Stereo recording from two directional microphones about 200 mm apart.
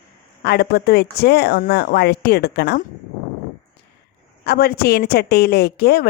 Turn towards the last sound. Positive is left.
turn(degrees=55)  # may be behind; listen again after turning